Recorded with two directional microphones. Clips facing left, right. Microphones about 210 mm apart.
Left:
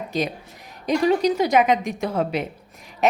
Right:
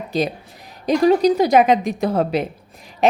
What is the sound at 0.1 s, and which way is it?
A woman's voice, 30° right (ahead or behind).